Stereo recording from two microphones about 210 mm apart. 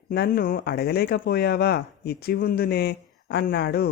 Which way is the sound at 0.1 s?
45° left (ahead or behind).